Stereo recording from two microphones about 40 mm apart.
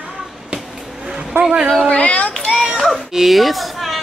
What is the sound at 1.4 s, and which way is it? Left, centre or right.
Speech, centre.